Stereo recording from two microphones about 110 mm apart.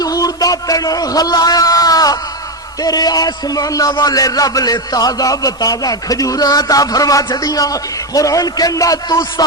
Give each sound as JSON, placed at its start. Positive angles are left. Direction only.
{"t": 0.0, "sound": "a man's voice", "side_deg": 35}